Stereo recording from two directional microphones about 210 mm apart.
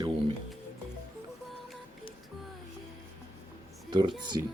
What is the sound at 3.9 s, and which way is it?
Speech, 20° right (ahead or behind).